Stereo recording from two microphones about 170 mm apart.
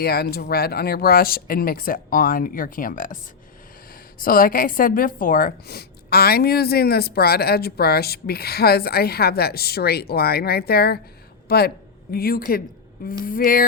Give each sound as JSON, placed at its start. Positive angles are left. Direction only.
{"t": 0.0, "sound": "speech", "side_deg": 65}
{"t": 4.2, "sound": "a woman's voice", "side_deg": 60}